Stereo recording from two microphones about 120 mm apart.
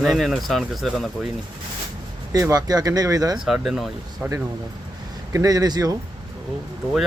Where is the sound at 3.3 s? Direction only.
5° right (ahead or behind).